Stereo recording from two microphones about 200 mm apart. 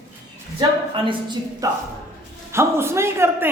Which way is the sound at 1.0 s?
20° right (ahead or behind).